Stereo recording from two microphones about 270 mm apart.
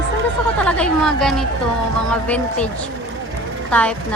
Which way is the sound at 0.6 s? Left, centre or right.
Centre.